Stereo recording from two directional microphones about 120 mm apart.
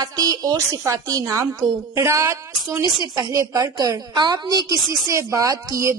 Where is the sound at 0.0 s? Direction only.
30° right (ahead or behind).